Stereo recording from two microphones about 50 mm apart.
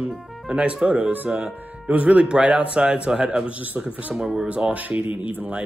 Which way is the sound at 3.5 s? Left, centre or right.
Right.